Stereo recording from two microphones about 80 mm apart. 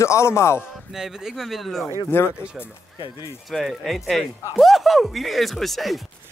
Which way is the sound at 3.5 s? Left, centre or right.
Centre.